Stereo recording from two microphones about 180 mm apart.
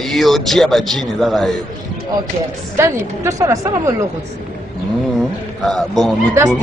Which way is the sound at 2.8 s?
15° right (ahead or behind).